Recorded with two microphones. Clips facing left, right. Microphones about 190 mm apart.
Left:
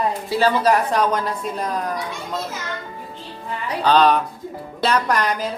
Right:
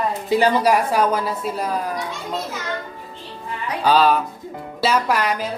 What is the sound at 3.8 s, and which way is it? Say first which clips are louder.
Speech: left 1 dB; 5° right (ahead or behind).